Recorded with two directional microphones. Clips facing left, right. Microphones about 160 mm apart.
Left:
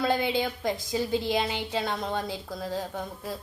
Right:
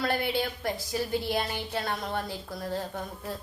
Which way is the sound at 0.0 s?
20° left (ahead or behind).